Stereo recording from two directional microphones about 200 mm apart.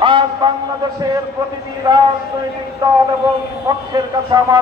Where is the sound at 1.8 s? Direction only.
20° right (ahead or behind).